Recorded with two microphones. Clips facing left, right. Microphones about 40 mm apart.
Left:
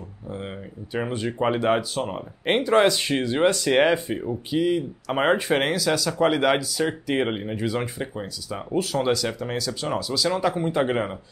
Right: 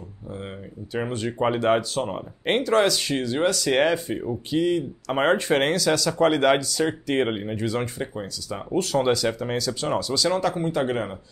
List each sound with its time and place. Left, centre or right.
0.3 s speech: centre
2.4 s speech: centre
10.4 s speech: centre